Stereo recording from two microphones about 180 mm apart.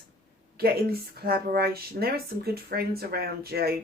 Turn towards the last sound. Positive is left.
turn(degrees=-60)  # may be behind; listen again after turning